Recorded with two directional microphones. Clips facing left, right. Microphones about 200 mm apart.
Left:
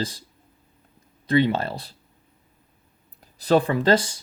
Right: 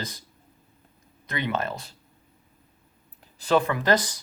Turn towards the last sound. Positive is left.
turn(degrees=30)  # may be behind; listen again after turning